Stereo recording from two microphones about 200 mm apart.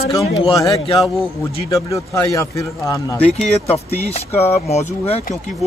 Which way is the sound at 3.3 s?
30° left (ahead or behind).